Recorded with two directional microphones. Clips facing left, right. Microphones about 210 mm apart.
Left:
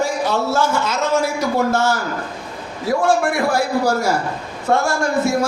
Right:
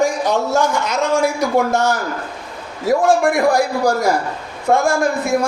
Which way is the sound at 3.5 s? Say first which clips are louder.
Right 2 dB; 15° right (ahead or behind).